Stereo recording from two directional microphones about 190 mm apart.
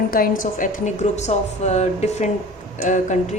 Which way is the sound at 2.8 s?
40° left (ahead or behind).